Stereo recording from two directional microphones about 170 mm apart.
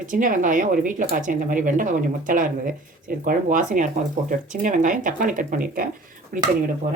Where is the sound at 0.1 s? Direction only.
50° right (ahead or behind).